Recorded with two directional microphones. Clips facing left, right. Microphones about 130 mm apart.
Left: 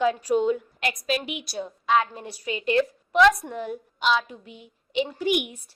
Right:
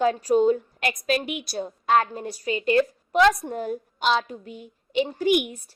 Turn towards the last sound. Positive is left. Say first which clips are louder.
# right 3 dB
turn(degrees=-45)  # may be behind; listen again after turning